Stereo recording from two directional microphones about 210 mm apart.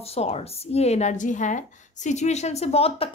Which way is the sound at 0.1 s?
30° left (ahead or behind).